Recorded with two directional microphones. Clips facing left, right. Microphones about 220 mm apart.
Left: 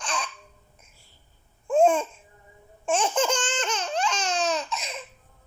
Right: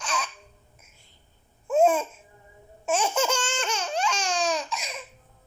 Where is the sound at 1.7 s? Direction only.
5° right (ahead or behind).